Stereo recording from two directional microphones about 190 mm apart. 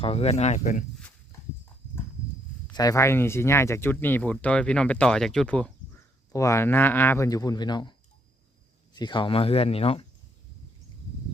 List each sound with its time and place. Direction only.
0.0 s speech: 30° left (ahead or behind)
2.7 s speech: 20° left (ahead or behind)
6.3 s speech: 15° left (ahead or behind)